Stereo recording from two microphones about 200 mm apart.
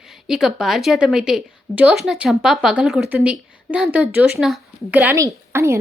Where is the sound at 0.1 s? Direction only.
Centre (ahead or behind).